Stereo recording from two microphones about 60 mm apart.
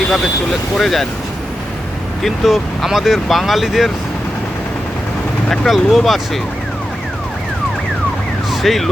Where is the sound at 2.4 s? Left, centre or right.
Centre.